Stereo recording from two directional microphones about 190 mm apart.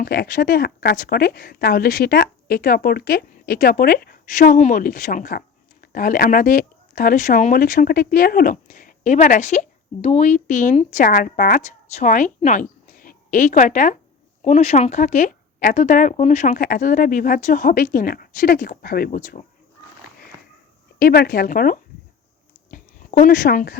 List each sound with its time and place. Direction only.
0.0 s speech: 55° left (ahead or behind)
21.0 s speech: 50° left (ahead or behind)
22.7 s a sound: 45° left (ahead or behind)